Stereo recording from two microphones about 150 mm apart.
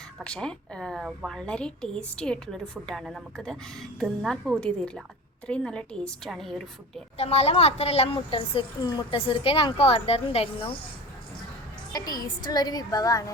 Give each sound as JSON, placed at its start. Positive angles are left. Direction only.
{"t": 0.2, "sound": "a woman's voice", "side_deg": 5}
{"t": 7.2, "sound": "a woman's voice", "side_deg": 45}
{"t": 11.9, "sound": "a woman's voice", "side_deg": 25}